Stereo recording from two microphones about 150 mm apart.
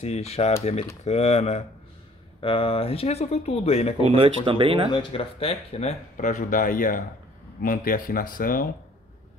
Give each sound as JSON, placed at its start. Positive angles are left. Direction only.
{"t": 0.0, "sound": "speech", "side_deg": 45}
{"t": 4.0, "sound": "speech", "side_deg": -40}
{"t": 4.9, "sound": "speech", "side_deg": 40}